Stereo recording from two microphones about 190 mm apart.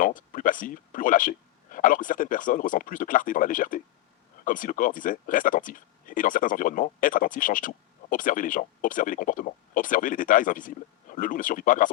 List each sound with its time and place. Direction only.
0.0 s speech: 45° left (ahead or behind)